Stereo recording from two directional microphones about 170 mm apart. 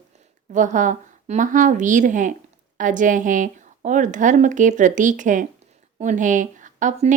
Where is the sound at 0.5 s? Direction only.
50° right (ahead or behind).